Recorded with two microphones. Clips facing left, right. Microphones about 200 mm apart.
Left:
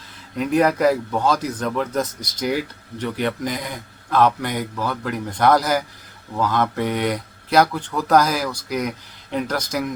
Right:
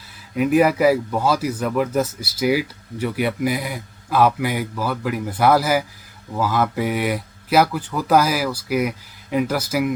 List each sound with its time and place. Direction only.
0.3 s speech: 5° right (ahead or behind)